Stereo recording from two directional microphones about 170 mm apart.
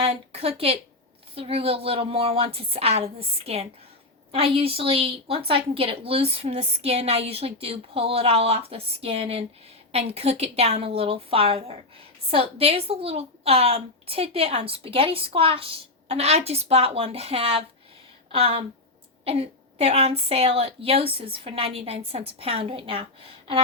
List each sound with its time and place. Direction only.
0.0 s a woman's voice: 35° right (ahead or behind)